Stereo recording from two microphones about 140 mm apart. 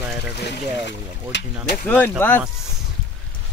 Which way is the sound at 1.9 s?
15° left (ahead or behind).